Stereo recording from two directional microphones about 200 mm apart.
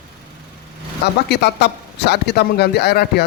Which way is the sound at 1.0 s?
55° left (ahead or behind).